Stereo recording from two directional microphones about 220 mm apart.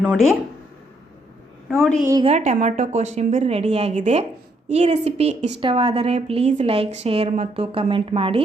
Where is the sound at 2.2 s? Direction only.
30° right (ahead or behind).